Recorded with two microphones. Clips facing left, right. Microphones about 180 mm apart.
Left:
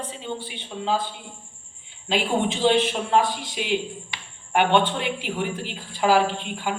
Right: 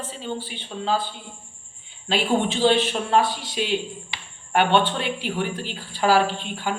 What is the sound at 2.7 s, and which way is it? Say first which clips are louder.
Speech: left 1 dB; 10° left (ahead or behind).